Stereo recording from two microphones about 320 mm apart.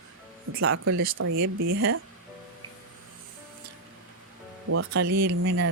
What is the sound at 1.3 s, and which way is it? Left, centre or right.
Speech, right.